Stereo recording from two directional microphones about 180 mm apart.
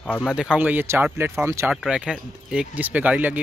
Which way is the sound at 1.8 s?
5° right (ahead or behind).